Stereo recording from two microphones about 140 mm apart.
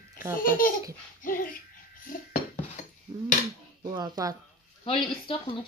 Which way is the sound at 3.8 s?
30° right (ahead or behind).